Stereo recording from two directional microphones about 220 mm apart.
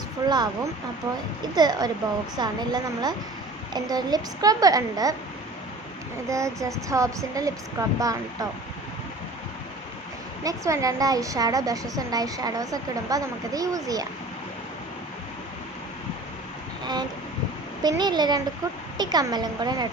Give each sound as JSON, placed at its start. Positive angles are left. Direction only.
{"t": 0.3, "sound": "a woman's voice", "side_deg": -20}
{"t": 6.3, "sound": "a woman's voice", "side_deg": -15}
{"t": 10.4, "sound": "a woman's voice", "side_deg": -15}
{"t": 16.8, "sound": "a woman's voice", "side_deg": -20}